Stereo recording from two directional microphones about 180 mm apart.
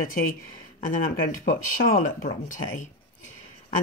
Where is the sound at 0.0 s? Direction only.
50° left (ahead or behind).